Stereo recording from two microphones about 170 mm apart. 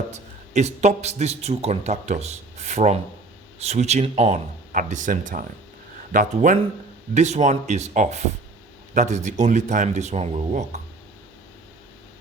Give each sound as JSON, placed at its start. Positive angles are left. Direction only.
{"t": 0.1, "sound": "a man's voice", "side_deg": -40}